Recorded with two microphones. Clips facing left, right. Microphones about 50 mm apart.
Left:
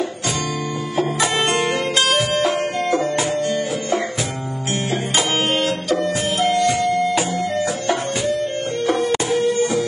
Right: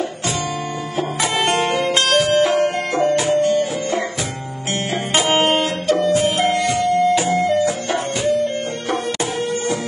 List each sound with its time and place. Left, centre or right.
5.1 s music: right